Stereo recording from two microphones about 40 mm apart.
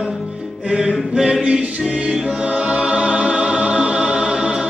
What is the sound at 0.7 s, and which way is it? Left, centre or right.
Music, centre.